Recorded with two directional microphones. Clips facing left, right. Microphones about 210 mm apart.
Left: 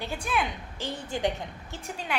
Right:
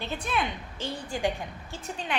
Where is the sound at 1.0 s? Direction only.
20° left (ahead or behind).